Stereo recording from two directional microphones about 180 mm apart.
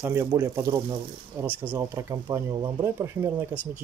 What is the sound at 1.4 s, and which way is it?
Speech, 10° right (ahead or behind).